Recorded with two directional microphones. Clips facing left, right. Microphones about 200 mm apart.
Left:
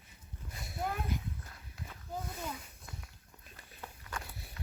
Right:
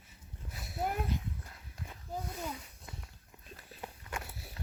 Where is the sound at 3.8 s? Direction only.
20° right (ahead or behind).